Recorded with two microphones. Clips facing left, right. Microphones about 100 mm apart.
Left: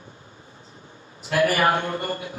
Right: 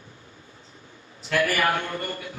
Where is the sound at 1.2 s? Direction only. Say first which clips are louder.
Left 3 dB; 30° left (ahead or behind).